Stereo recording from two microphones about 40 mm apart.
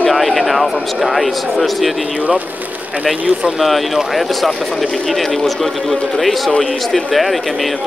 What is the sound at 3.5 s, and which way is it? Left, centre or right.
Speech, centre.